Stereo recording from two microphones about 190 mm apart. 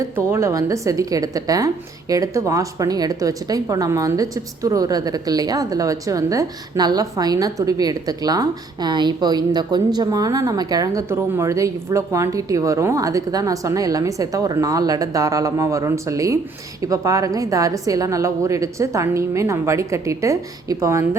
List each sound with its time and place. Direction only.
0.0 s a woman's voice: 15° right (ahead or behind)